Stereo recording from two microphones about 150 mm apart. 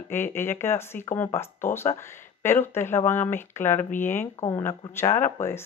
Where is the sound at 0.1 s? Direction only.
15° left (ahead or behind).